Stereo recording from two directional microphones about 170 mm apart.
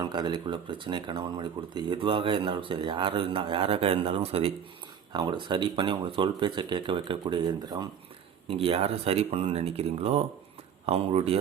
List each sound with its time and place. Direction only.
0.0 s speech: 25° right (ahead or behind)
8.4 s speech: 35° right (ahead or behind)